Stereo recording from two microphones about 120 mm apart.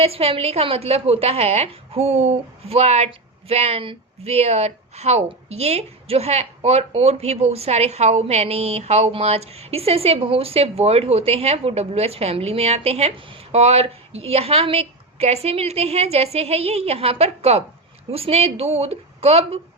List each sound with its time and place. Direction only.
0.0 s speech: 55° right (ahead or behind)